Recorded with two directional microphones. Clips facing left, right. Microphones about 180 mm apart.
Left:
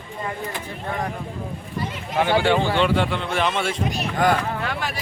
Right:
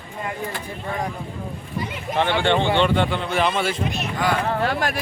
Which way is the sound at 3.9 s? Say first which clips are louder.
Left 3 dB; 45° left (ahead or behind).